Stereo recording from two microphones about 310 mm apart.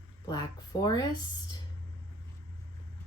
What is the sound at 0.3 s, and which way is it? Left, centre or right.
Speech, centre.